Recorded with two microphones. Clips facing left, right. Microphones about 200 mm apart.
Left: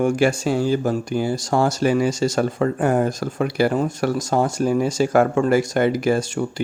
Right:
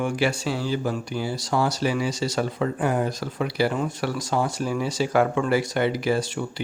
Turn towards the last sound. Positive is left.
turn(degrees=45)  # may be behind; listen again after turning